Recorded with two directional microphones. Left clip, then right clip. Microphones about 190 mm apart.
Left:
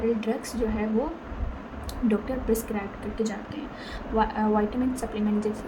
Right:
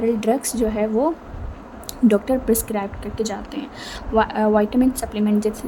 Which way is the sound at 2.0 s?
50° right (ahead or behind).